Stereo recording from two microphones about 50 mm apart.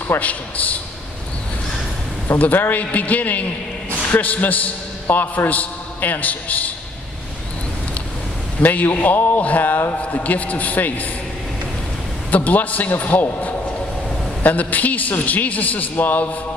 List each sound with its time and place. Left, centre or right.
0.2 s a man's voice: left
2.3 s a man's voice: left
8.5 s a man's voice: left
12.3 s a man's voice: left